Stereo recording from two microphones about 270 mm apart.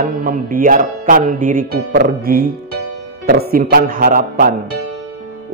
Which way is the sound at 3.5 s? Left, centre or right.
Right.